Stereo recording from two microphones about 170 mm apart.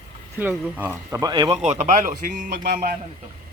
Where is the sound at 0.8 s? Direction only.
15° right (ahead or behind).